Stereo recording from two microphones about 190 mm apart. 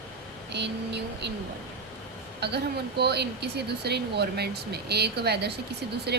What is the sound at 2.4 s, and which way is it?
Speech, 60° right (ahead or behind).